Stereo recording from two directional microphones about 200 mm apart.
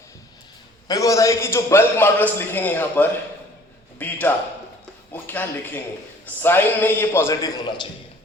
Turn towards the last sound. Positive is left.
turn(degrees=20)  # may be behind; listen again after turning